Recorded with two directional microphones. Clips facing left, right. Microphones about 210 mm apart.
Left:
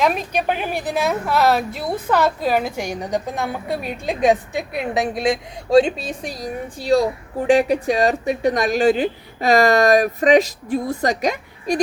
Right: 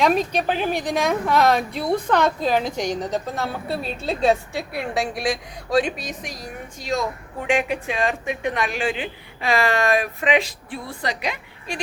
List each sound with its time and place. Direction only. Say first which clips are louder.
0.0 s a woman's voice: even; 10° left (ahead or behind); by 11.8 s 40° left (ahead or behind)